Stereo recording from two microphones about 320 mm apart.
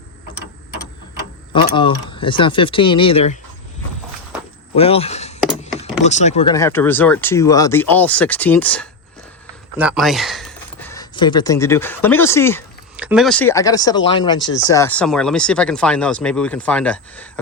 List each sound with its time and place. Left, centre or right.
1.5 s speech: centre
4.7 s speech: centre
13.0 s speech: centre